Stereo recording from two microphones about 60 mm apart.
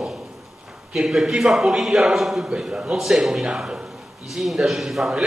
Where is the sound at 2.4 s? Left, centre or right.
Centre.